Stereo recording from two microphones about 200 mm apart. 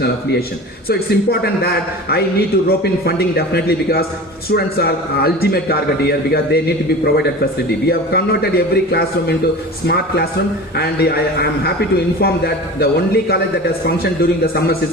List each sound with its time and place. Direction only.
0.9 s a man's voice: 50° left (ahead or behind)
7.9 s a man's voice: 50° left (ahead or behind)